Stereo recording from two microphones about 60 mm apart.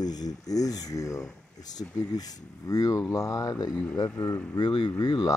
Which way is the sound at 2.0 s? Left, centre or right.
Left.